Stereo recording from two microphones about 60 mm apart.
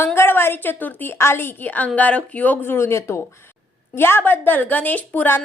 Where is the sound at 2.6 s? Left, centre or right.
Left.